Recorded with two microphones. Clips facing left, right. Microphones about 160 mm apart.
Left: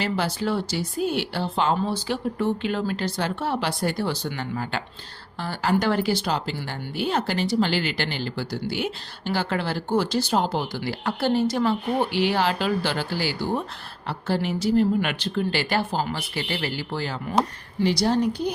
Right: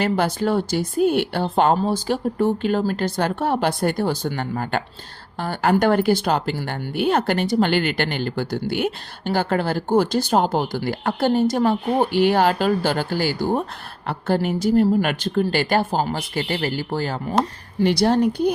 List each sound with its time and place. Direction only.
0.0 s speech: 50° right (ahead or behind)
17.7 s speech: 60° right (ahead or behind)